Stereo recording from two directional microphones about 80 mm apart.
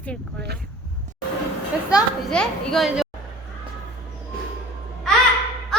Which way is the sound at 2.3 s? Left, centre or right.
Centre.